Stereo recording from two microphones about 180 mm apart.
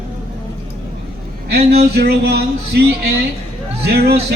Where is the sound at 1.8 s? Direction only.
60° right (ahead or behind).